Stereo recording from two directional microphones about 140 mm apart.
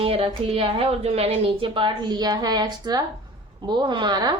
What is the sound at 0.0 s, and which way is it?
A woman's voice, 40° right (ahead or behind).